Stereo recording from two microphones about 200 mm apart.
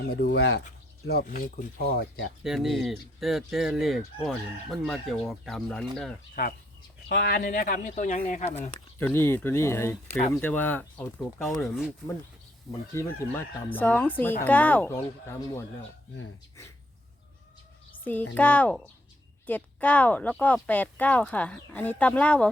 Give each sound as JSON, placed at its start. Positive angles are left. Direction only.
{"t": 0.1, "sound": "speech", "side_deg": 50}
{"t": 2.4, "sound": "fowl", "side_deg": 0}
{"t": 7.1, "sound": "speech", "side_deg": 55}
{"t": 9.0, "sound": "speech", "side_deg": 10}
{"t": 10.1, "sound": "speech", "side_deg": 30}
{"t": 10.4, "sound": "speech", "side_deg": 10}
{"t": 11.6, "sound": "fowl", "side_deg": 0}
{"t": 12.9, "sound": "speech", "side_deg": 15}
{"t": 18.0, "sound": "a child's voice", "side_deg": 10}